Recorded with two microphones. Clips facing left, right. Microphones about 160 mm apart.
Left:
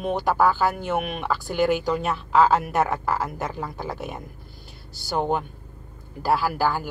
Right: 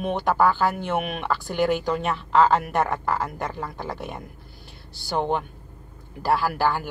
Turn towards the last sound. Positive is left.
turn(degrees=0)  # may be behind; listen again after turning